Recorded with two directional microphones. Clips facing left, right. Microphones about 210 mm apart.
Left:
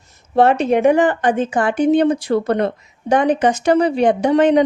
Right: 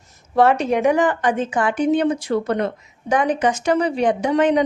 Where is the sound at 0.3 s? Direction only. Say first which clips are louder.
Left 3 dB; 25° left (ahead or behind).